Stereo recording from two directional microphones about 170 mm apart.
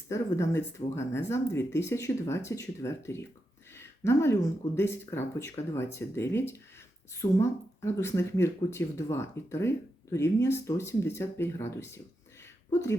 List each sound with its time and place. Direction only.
0.1 s speech: 15° left (ahead or behind)